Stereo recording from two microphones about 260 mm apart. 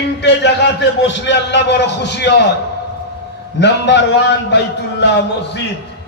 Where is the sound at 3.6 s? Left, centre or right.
Left.